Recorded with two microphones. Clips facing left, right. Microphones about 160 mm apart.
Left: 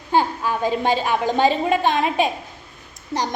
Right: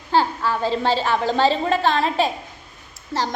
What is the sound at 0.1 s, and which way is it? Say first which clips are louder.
A woman's voice: even; 15° left (ahead or behind).